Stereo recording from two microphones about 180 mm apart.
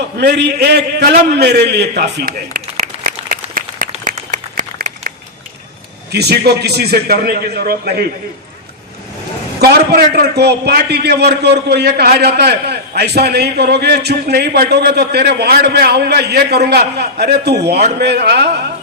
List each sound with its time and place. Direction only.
0.2 s a man's voice: 70° right (ahead or behind); by 3.6 s 55° right (ahead or behind)
4.0 s applause: 45° right (ahead or behind)
6.1 s a man's voice: 65° right (ahead or behind)
9.6 s a man's voice: 60° right (ahead or behind)